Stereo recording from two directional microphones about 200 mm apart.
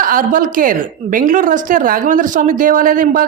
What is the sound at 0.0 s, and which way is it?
A woman's voice, 45° right (ahead or behind).